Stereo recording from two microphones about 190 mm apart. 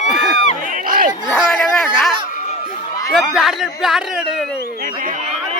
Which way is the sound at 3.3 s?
Centre (ahead or behind).